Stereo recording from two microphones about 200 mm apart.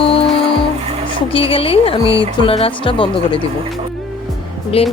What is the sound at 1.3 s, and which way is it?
Speech, 25° left (ahead or behind).